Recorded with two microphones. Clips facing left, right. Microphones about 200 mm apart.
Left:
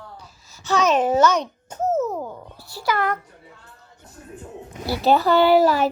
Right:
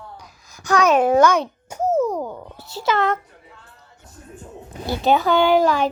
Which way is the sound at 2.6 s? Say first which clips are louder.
Right 3 dB; 20° right (ahead or behind).